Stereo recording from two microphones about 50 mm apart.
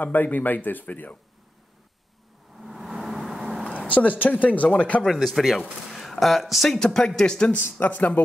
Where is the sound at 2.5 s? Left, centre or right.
Centre.